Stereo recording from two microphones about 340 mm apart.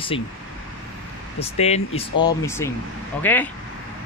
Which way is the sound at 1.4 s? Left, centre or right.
Centre.